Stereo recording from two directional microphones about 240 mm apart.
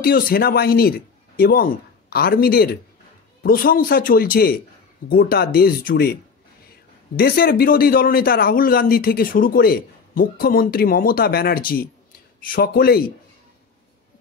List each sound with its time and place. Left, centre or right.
0.0 s a man's voice: left
7.2 s a man's voice: left